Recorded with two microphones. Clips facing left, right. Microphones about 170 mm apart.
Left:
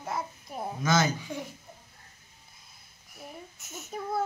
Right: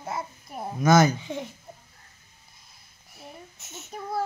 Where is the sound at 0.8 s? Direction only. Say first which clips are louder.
Right 7 dB; 45° right (ahead or behind).